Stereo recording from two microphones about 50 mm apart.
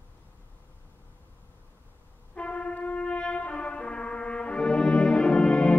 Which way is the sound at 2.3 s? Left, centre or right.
Left.